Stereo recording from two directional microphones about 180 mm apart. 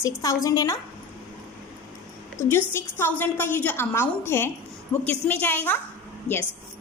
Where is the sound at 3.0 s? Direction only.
10° left (ahead or behind).